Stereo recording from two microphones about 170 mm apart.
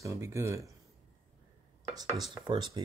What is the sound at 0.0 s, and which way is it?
Speech, 20° right (ahead or behind).